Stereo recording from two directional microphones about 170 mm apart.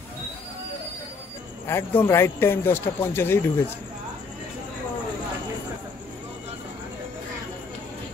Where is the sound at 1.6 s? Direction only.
15° left (ahead or behind).